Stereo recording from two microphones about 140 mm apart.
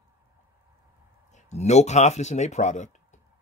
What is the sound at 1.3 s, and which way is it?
A man's voice, 50° left (ahead or behind).